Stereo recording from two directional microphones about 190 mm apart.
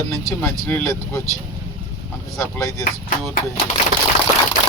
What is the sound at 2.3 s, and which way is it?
Speech, 15° left (ahead or behind).